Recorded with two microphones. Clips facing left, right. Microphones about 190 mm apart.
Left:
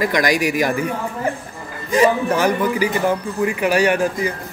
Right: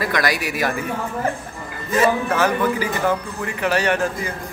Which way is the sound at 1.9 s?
15° left (ahead or behind).